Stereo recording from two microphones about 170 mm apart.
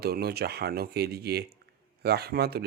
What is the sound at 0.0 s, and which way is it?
Speech, 65° right (ahead or behind).